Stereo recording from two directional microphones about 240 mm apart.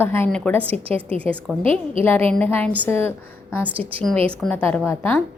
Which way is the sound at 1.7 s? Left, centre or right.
Right.